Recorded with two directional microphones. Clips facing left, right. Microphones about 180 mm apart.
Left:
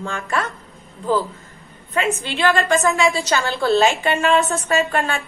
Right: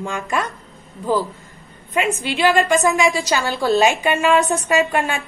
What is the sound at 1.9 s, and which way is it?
A woman's voice, 15° right (ahead or behind).